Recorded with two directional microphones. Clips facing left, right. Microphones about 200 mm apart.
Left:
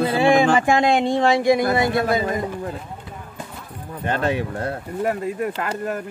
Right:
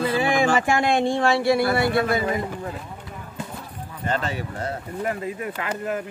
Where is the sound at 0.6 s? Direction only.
20° left (ahead or behind).